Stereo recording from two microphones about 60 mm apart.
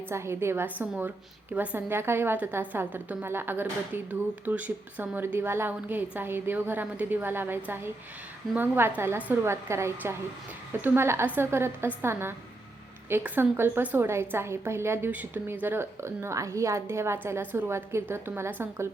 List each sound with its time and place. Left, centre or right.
0.1 s a woman's voice: right
2.0 s speech: right
5.2 s a woman's voice: right
10.7 s a woman's voice: right
13.2 s a woman's voice: right
15.1 s a woman's voice: right
17.4 s speech: right
17.7 s a woman's voice: right